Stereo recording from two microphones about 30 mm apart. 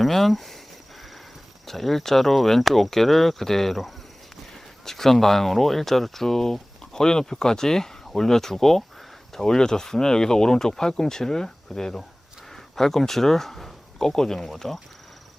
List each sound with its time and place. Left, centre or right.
0.0 s speech: centre
1.6 s speech: centre
4.9 s speech: centre
6.9 s speech: left; by 14.8 s centre